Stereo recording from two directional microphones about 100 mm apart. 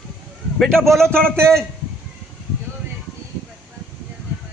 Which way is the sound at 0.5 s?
5° left (ahead or behind).